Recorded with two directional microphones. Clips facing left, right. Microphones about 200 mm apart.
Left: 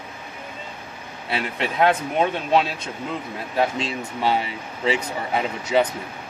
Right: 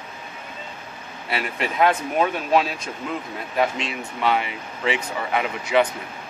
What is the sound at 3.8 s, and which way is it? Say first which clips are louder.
Speech: left 1 dB; 35° left (ahead or behind).